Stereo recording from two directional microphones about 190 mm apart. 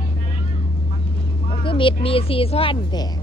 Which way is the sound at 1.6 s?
25° left (ahead or behind).